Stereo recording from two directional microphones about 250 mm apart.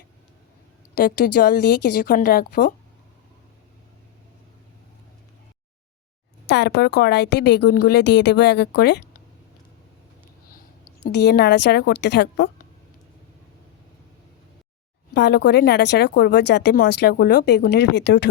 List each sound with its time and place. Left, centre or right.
0.9 s a woman's voice: left
6.5 s speech: left
11.0 s a woman's voice: left
15.1 s speech: left